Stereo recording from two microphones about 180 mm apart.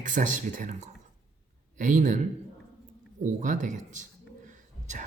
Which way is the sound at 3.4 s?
45° right (ahead or behind).